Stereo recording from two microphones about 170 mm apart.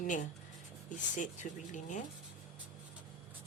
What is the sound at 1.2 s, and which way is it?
Speech, 50° left (ahead or behind).